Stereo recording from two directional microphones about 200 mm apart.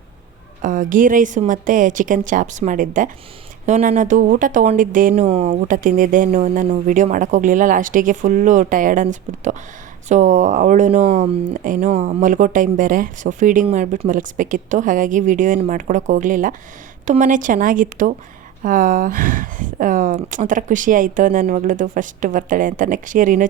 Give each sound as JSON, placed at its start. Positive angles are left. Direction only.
{"t": 0.6, "sound": "speech", "side_deg": -40}
{"t": 11.5, "sound": "speech", "side_deg": -40}